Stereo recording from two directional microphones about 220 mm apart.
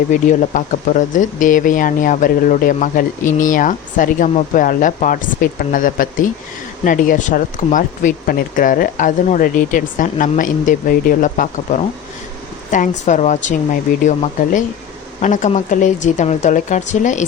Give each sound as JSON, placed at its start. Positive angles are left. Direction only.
{"t": 0.1, "sound": "speech", "side_deg": 35}